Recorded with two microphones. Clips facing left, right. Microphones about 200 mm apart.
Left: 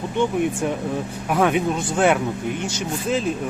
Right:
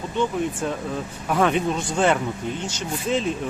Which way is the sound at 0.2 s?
15° left (ahead or behind).